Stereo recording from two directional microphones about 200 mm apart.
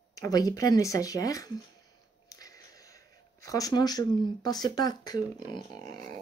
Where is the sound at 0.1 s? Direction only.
20° left (ahead or behind).